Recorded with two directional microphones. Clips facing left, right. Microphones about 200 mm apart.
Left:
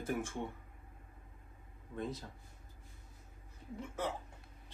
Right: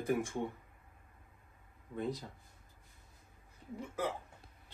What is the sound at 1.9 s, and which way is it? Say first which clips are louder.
Speech: right 3 dB; 15° right (ahead or behind).